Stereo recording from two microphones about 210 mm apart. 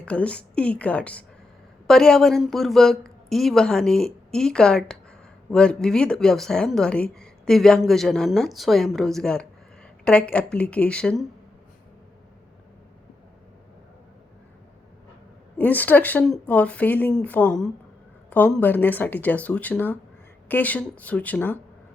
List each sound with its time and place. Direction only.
0.0 s a woman's voice: 5° left (ahead or behind)
15.5 s speech: 10° left (ahead or behind)